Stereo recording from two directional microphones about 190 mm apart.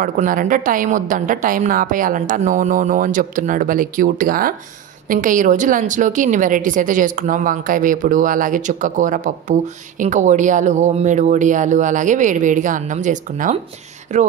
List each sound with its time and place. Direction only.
0.0 s a woman's voice: 45° right (ahead or behind)